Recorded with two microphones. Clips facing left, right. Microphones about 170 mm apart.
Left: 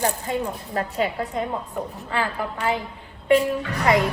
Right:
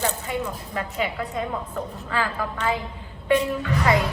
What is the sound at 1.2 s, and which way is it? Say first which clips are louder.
A woman's voice: left 1 dB; 20° left (ahead or behind).